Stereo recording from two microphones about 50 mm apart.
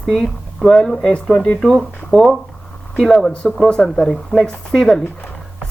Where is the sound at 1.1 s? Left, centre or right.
Left.